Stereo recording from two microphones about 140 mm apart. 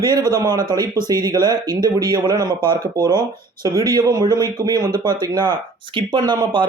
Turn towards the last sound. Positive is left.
turn(degrees=-30)  # may be behind; listen again after turning